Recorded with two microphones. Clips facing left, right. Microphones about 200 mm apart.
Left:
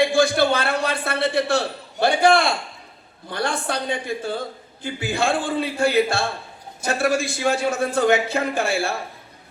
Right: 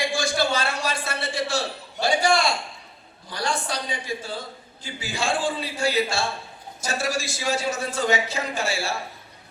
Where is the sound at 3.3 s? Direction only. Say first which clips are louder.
Left 3 dB; 60° left (ahead or behind).